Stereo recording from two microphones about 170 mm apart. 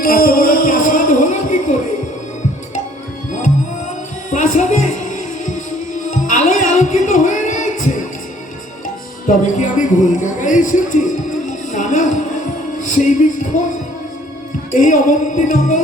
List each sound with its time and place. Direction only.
0.0 s music: 60° left (ahead or behind)
4.3 s music: 45° left (ahead or behind)
9.2 s speech: 50° left (ahead or behind)
12.8 s music: 50° left (ahead or behind)
14.7 s music: 50° left (ahead or behind)